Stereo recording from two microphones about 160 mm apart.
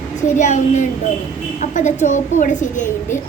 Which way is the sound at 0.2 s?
50° left (ahead or behind).